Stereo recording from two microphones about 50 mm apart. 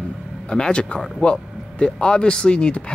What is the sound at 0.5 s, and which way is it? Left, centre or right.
Speech, centre.